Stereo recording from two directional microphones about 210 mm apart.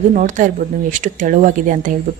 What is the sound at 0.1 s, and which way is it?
A woman's voice, 35° right (ahead or behind).